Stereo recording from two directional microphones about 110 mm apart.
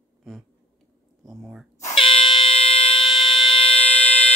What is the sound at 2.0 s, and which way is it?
Fire alarm, 50° left (ahead or behind).